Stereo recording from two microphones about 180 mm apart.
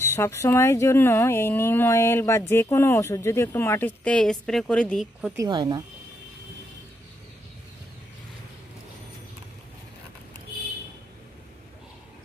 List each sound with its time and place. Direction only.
0.0 s speech: 15° left (ahead or behind)
5.3 s speech: 20° right (ahead or behind)